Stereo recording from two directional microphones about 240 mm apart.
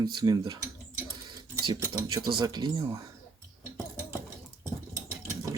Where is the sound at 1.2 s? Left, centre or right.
Centre.